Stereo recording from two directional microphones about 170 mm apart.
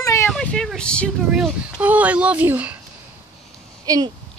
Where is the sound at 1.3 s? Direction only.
5° right (ahead or behind).